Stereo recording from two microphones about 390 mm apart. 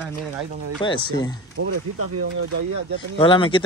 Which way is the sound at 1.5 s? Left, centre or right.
Right.